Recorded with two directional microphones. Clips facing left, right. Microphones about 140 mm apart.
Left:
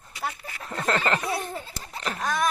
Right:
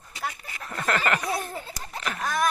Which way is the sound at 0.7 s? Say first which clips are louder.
Left 1 dB; 25° left (ahead or behind).